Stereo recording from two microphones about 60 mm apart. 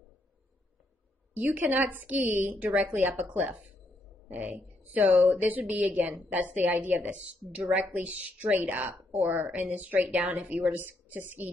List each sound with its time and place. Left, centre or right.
1.3 s a woman's voice: right
2.2 s speech: right
2.5 s a woman's voice: right